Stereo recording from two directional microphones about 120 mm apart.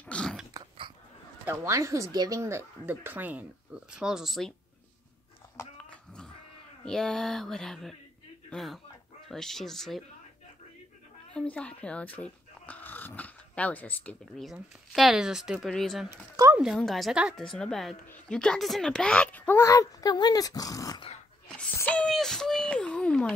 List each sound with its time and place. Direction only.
0.0 s biting: 10° left (ahead or behind)
1.4 s speech: 25° right (ahead or behind); by 4.6 s centre (ahead or behind)
5.9 s a sound: 5° left (ahead or behind)
6.8 s speech: 5° left (ahead or behind)
11.3 s speech: 10° left (ahead or behind)
14.3 s speech: centre (ahead or behind)
17.4 s speech: 5° left (ahead or behind); by 21.0 s 30° left (ahead or behind)
21.7 s speech: 10° left (ahead or behind)